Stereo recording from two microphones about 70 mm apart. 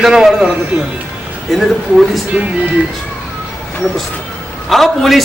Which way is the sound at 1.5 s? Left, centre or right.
Centre.